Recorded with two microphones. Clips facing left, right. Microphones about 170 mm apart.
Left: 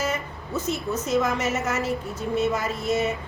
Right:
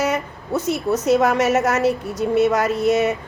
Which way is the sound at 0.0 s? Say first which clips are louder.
Right 6 dB; 75° right (ahead or behind).